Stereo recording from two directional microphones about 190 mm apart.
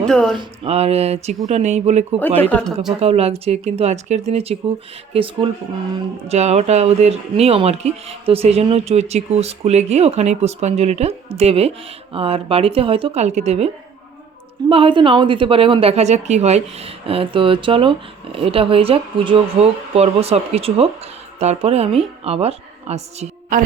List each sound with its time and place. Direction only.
0.0 s speech: 5° left (ahead or behind)
0.3 s speech: 30° right (ahead or behind)
2.5 s speech: 5° left (ahead or behind)
3.0 s a woman's voice: 35° right (ahead or behind)
14.7 s a woman's voice: 25° right (ahead or behind)
23.5 s speech: 45° right (ahead or behind)